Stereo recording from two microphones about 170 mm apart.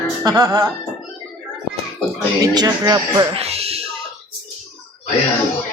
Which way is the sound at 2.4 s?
25° right (ahead or behind).